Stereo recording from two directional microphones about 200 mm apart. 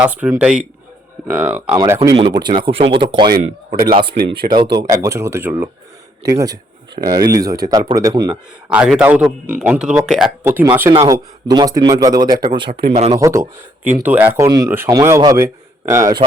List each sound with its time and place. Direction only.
0.0 s speech: 5° right (ahead or behind)
1.7 s speech: 20° right (ahead or behind)
3.7 s speech: 50° right (ahead or behind)
4.5 s speech: 20° right (ahead or behind)
8.7 s speech: 5° right (ahead or behind); by 13.1 s 30° right (ahead or behind)
13.1 s speech: 15° right (ahead or behind)